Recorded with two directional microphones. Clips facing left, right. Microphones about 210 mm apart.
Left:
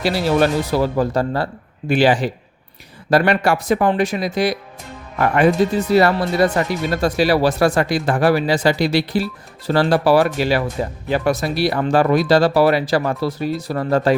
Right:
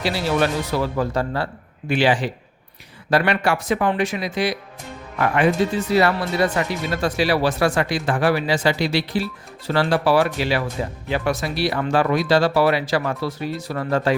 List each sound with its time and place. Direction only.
0.0 s speech: 40° left (ahead or behind)